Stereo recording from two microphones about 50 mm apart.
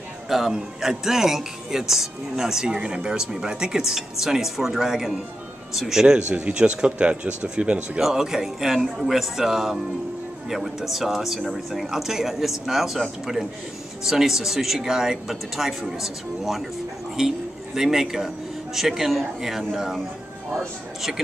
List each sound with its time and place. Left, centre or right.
0.3 s speech: centre
6.3 s speech: right
8.0 s speech: centre